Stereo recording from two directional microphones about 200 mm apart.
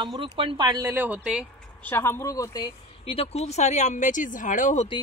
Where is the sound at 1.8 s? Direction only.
10° left (ahead or behind); by 4.8 s 40° left (ahead or behind).